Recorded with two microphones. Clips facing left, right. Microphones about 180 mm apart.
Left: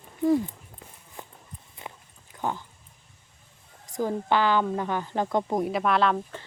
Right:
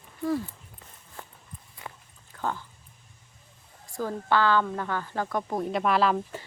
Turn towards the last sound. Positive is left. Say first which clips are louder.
# even
turn(degrees=-5)  # may be behind; listen again after turning